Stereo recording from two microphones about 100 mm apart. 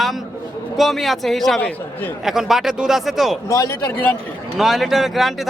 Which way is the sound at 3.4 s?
30° left (ahead or behind).